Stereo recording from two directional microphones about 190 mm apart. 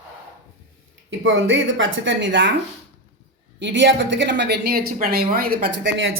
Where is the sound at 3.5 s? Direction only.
70° right (ahead or behind).